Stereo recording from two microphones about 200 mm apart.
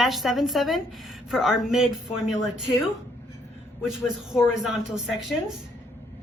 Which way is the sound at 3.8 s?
Centre (ahead or behind).